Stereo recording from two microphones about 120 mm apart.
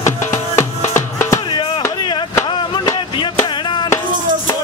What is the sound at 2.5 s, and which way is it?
Chop, 40° left (ahead or behind).